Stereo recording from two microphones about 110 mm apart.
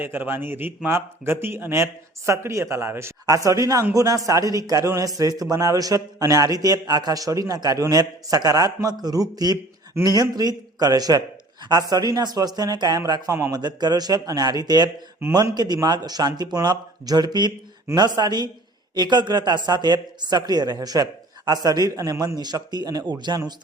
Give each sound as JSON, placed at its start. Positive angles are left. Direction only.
{"t": 0.0, "sound": "a man's voice", "side_deg": -20}
{"t": 22.4, "sound": "a man's voice", "side_deg": -40}